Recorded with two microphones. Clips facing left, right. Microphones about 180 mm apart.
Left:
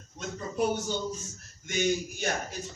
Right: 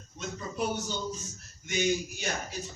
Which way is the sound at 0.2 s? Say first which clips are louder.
Left 2 dB; 45° left (ahead or behind).